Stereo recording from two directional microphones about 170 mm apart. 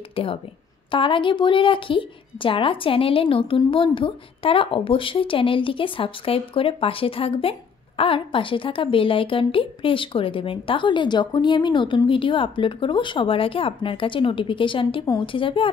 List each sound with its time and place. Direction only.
0.1 s a woman's voice: 30° left (ahead or behind)